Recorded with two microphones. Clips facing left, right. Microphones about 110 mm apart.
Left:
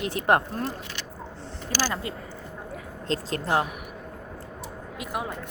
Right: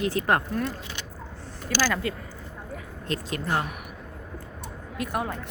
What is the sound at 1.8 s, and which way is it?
Speech, 20° left (ahead or behind).